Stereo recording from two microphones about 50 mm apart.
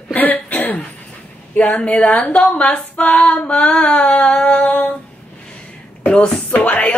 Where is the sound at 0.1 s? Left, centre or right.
Left.